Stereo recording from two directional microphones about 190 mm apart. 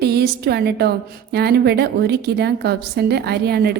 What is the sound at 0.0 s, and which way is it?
A woman's voice, 60° right (ahead or behind).